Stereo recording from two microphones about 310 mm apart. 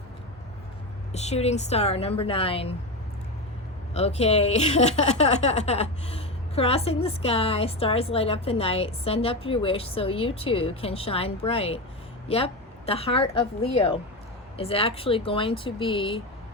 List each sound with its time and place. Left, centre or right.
1.1 s speech: left
3.9 s a woman's voice: centre